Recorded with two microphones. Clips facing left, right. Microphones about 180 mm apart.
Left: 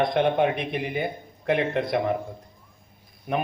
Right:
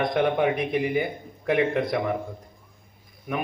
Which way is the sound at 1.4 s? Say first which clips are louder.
Right 1 dB; 25° left (ahead or behind).